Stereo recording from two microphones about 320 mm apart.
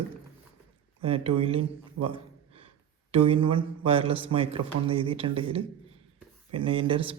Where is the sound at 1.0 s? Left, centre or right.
Centre.